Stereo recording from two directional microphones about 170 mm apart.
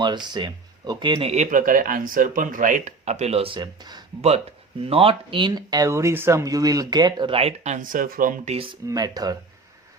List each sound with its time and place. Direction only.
0.0 s speech: 25° right (ahead or behind); by 8.5 s 50° right (ahead or behind)
8.9 s speech: 20° right (ahead or behind)